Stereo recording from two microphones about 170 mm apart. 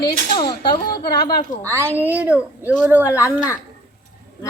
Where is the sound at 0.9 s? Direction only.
65° left (ahead or behind).